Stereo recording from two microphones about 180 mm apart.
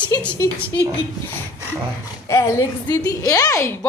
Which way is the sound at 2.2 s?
15° left (ahead or behind).